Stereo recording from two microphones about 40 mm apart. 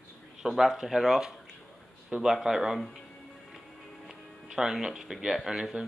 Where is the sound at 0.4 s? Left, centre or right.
Centre.